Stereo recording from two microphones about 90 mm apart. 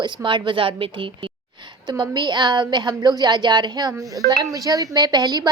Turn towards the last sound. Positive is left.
turn(degrees=-50)  # may be behind; listen again after turning